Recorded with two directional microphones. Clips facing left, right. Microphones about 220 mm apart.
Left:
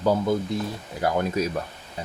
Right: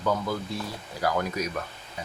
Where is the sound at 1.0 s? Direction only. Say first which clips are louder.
Left 4 dB; 25° left (ahead or behind).